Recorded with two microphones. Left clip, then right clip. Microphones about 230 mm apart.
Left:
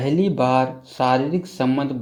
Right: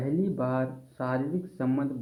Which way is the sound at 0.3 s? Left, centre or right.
Left.